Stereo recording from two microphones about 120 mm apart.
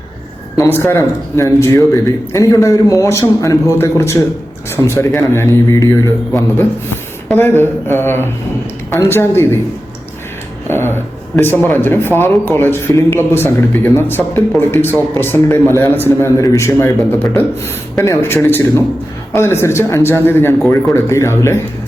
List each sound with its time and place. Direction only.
0.5 s speech: 25° left (ahead or behind)
10.7 s speech: 20° left (ahead or behind)